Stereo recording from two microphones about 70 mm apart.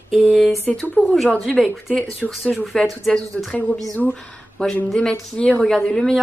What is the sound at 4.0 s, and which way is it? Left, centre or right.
A woman's voice, centre.